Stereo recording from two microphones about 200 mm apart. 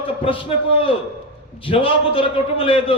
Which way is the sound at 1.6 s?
25° left (ahead or behind).